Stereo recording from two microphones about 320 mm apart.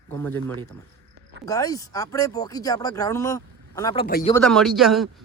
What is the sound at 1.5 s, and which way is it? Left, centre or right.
Speech, centre.